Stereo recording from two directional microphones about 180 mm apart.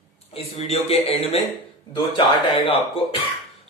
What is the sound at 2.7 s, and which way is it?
Speech, 30° left (ahead or behind).